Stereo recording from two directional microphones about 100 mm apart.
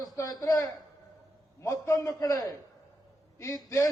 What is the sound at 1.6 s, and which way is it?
A man's voice, 35° left (ahead or behind).